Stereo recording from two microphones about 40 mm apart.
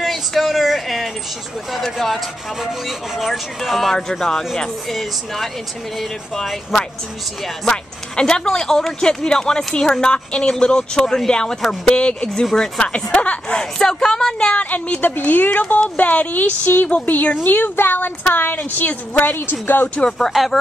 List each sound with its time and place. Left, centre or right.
0.0 s a sound: centre
1.7 s speech: centre
3.2 s speech: centre
7.6 s speech: centre
11.9 s speech: left
13.6 s speech: centre
14.5 s speech: left
15.5 s speech: left
19.6 s speech: left
20.1 s speech: centre